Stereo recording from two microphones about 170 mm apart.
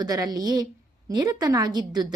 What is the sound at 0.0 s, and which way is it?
A woman's voice, 20° right (ahead or behind).